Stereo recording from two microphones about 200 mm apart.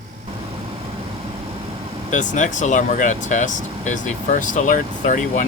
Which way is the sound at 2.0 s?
40° left (ahead or behind).